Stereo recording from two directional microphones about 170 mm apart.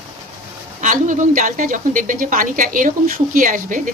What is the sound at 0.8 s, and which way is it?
A woman's voice, 45° right (ahead or behind).